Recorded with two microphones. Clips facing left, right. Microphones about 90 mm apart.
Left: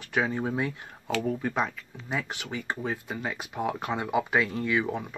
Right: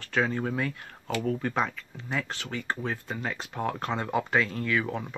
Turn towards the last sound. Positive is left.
turn(degrees=20)  # may be behind; listen again after turning